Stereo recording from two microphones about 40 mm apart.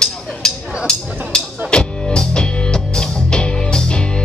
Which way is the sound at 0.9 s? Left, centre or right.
Left.